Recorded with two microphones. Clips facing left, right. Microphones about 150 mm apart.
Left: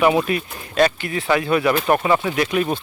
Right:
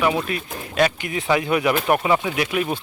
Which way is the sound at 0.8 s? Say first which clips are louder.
Left 2 dB; 10° right (ahead or behind).